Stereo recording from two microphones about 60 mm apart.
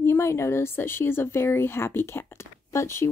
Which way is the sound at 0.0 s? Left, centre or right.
Left.